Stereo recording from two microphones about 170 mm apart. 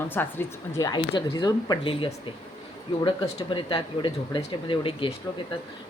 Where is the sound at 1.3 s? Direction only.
25° left (ahead or behind).